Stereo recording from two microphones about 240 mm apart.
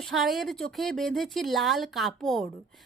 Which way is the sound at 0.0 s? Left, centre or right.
Centre.